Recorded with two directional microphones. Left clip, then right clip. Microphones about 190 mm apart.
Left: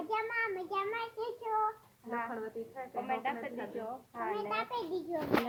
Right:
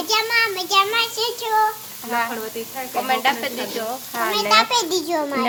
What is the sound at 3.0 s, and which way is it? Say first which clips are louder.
Sizzle: right 17 dB; 40° right (ahead or behind).